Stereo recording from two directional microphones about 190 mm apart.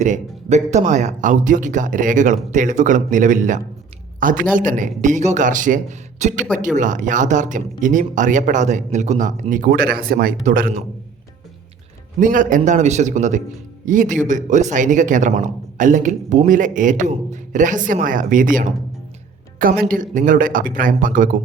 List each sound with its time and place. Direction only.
0.0 s speech: 40° right (ahead or behind)
12.2 s speech: 45° right (ahead or behind)